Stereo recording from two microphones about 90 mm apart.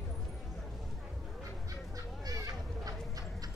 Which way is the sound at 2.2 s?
40° right (ahead or behind).